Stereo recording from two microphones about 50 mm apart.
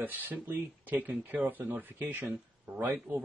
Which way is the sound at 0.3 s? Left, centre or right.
Right.